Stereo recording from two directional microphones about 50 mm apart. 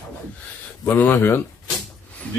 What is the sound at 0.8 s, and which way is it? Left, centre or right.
Speech, left.